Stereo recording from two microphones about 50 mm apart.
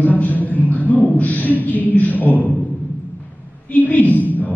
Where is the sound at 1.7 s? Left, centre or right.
Left.